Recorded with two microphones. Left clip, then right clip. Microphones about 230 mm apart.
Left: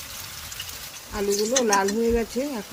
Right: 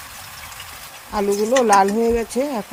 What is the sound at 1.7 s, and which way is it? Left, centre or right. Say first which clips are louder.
Speech: right 8 dB; right.